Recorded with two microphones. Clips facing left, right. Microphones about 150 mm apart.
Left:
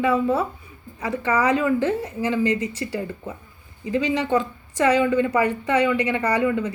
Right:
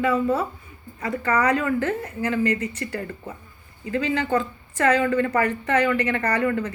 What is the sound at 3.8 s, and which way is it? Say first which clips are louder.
A woman's voice: left 2 dB; 15° left (ahead or behind).